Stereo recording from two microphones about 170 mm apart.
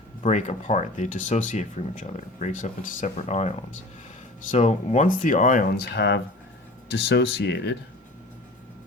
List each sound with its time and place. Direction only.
0.2 s speech: 40° left (ahead or behind)
5.7 s speech: 80° left